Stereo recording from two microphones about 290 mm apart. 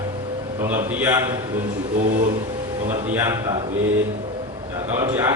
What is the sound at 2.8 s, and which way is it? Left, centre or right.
Speech, centre.